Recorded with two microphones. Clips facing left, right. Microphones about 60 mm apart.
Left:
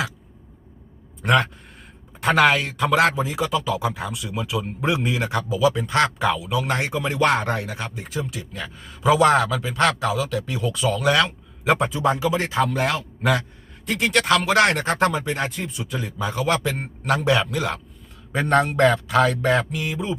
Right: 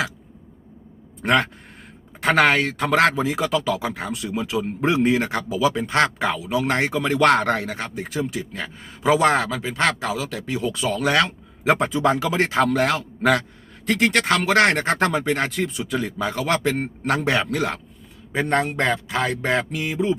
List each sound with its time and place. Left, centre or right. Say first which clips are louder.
1.2 s speech: even; right
6.9 s speech: right 3 dB; right
7.8 s a man's voice: right 3 dB; right
12.0 s a man's voice: right 1 dB; right
12.8 s a man's voice: right 3 dB; right
14.1 s speech: even; right
15.1 s a man's voice: right 3 dB; right
18.3 s a man's voice: left 3 dB; centre; by 20.1 s right